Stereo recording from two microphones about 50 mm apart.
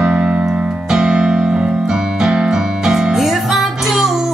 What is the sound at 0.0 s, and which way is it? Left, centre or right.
Keyboard, centre.